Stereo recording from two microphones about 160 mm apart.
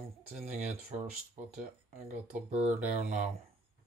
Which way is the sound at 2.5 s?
45° right (ahead or behind).